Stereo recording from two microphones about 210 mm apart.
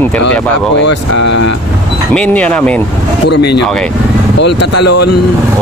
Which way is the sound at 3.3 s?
50° left (ahead or behind).